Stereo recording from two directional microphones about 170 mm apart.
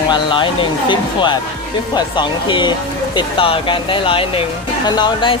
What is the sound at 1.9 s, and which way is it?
Speech, 25° left (ahead or behind).